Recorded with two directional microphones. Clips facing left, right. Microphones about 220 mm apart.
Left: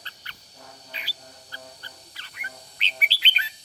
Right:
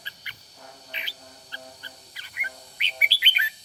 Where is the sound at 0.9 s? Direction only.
20° right (ahead or behind).